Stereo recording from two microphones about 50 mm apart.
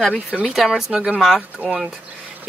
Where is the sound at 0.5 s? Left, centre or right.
Centre.